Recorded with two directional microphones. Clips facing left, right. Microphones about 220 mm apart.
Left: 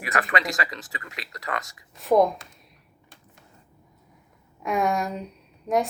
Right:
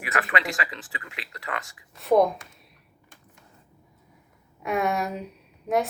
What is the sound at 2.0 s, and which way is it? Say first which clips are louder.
Speech: even; centre (ahead or behind).